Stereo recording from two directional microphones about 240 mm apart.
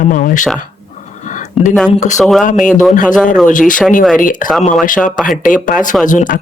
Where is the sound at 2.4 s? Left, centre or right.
Left.